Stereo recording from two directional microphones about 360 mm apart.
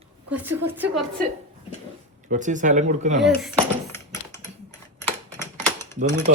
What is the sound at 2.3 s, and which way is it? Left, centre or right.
Speech, right.